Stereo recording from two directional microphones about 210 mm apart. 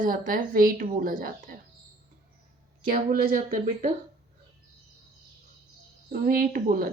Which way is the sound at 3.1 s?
45° right (ahead or behind).